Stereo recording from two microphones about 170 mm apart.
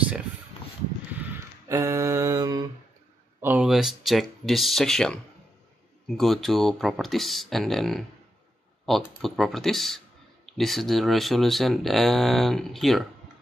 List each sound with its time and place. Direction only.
1.7 s a sound: 20° right (ahead or behind)
3.3 s speech: 10° right (ahead or behind)
3.6 s speech: centre (ahead or behind)